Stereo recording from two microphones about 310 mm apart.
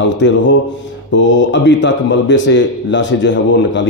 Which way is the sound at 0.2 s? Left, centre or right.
Left.